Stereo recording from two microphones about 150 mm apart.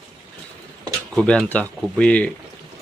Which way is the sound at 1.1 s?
5° left (ahead or behind).